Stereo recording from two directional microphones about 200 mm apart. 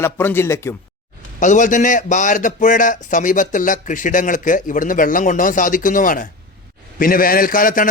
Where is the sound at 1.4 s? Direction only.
40° left (ahead or behind).